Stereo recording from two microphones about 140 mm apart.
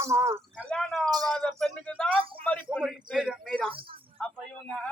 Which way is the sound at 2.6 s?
Centre (ahead or behind).